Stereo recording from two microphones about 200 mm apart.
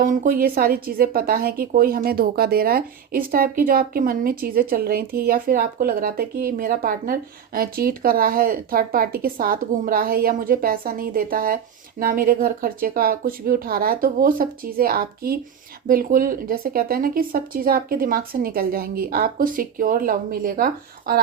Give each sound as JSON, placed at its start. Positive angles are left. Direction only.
{"t": 0.0, "sound": "speech", "side_deg": -40}